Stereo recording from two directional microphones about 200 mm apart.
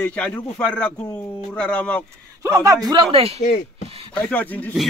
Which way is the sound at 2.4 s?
15° right (ahead or behind).